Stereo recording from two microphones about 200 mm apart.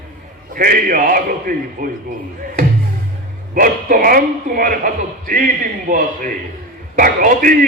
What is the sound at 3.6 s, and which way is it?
A man's voice, 45° right (ahead or behind).